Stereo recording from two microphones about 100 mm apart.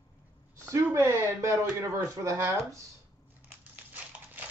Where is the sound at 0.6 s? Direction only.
30° right (ahead or behind).